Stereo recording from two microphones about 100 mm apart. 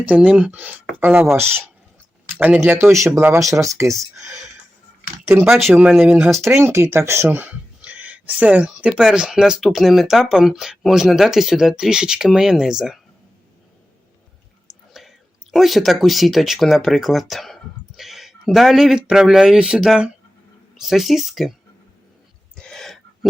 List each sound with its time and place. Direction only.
0.1 s speech: 15° right (ahead or behind)
2.4 s speech: 20° right (ahead or behind)
5.5 s speech: centre (ahead or behind)
6.4 s speech: 25° right (ahead or behind); by 13.0 s 5° right (ahead or behind)
15.0 s whispering: 5° right (ahead or behind)
15.5 s speech: centre (ahead or behind)
22.5 s a sound: 5° left (ahead or behind)